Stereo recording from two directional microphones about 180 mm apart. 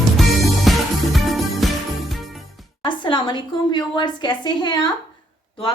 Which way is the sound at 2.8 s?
25° left (ahead or behind).